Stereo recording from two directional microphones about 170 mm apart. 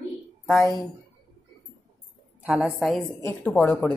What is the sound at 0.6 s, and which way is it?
Speech, 20° left (ahead or behind).